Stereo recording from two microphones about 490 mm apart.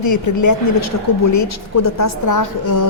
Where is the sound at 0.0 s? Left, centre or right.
Left.